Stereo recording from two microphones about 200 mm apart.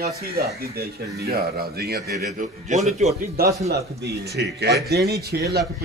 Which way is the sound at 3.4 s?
50° right (ahead or behind).